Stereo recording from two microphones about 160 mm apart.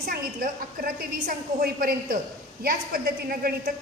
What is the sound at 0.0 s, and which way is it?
A woman's voice, 65° right (ahead or behind).